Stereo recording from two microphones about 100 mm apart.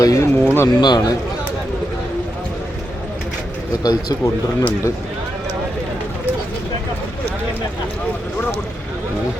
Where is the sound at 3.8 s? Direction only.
40° left (ahead or behind).